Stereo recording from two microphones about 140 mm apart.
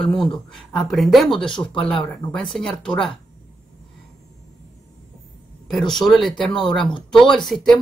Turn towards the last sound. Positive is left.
turn(degrees=0)  # may be behind; listen again after turning